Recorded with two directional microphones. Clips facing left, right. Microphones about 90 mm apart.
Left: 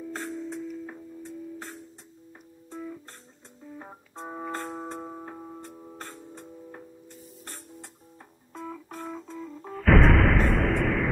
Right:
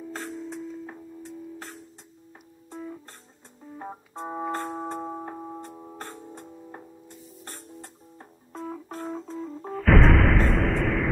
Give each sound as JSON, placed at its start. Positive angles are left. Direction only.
{"t": 0.1, "sound": "music", "side_deg": 0}
{"t": 3.7, "sound": "organ", "side_deg": -15}
{"t": 4.6, "sound": "music", "side_deg": -15}
{"t": 8.5, "sound": "music", "side_deg": -30}
{"t": 9.7, "sound": "music", "side_deg": 0}